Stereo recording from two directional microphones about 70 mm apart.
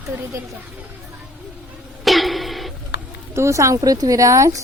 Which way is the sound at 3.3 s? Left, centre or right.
Right.